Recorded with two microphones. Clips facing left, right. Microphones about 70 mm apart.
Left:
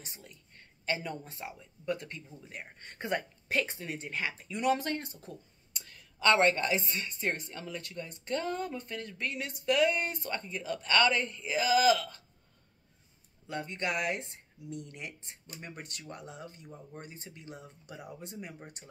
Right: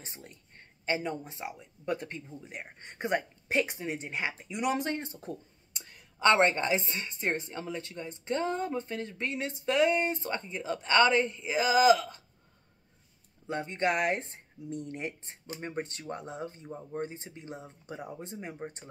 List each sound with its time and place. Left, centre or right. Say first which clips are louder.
0.0 s a woman's voice: right 3 dB; right
13.5 s a woman's voice: right 5 dB; right